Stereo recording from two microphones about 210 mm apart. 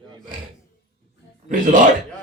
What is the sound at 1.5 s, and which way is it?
Speech, 40° right (ahead or behind).